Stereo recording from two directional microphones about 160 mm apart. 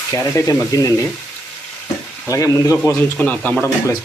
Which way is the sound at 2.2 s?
20° left (ahead or behind).